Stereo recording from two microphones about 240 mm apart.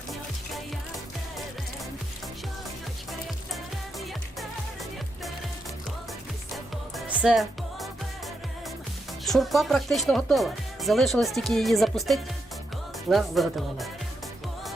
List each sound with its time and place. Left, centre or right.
3.1 s music: centre
6.9 s music: centre
9.2 s speech: centre